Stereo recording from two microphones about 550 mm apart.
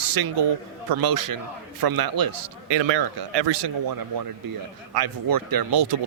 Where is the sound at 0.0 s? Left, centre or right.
Right.